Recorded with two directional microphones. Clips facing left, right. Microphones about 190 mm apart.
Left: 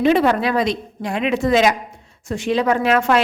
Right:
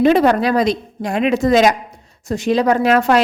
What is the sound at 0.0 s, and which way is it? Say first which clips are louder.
A woman's voice: right 3 dB; 40° right (ahead or behind).